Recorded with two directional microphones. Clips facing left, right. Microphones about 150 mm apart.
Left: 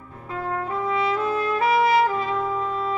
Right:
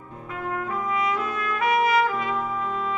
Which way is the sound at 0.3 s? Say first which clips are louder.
Left 2 dB; 30° left (ahead or behind).